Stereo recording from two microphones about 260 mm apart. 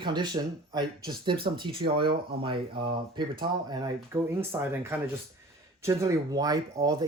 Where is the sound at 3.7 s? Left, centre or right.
Centre.